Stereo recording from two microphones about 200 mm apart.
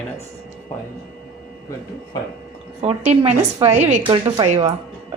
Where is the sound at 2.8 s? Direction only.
30° right (ahead or behind).